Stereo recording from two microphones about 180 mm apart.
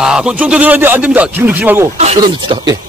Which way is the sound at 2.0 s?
35° right (ahead or behind).